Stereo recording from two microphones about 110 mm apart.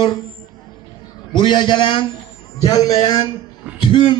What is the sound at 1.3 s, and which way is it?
Speech, 45° left (ahead or behind).